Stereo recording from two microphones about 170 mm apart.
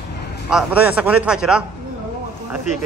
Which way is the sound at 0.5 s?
5° right (ahead or behind).